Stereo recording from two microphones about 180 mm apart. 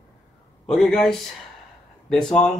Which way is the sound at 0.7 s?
Centre (ahead or behind).